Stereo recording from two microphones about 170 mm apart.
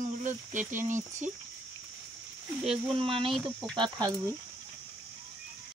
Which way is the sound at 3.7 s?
25° right (ahead or behind).